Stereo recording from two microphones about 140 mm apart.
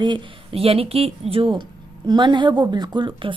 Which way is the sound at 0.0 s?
35° right (ahead or behind).